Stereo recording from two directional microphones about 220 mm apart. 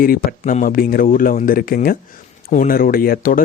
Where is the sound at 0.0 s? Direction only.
40° left (ahead or behind).